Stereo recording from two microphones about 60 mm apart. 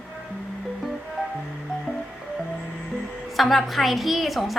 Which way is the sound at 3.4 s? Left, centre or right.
Centre.